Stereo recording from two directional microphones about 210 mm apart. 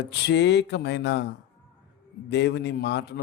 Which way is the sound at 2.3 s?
55° left (ahead or behind).